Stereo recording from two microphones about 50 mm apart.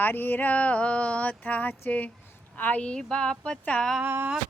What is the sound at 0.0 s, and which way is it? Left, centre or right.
Speech, left.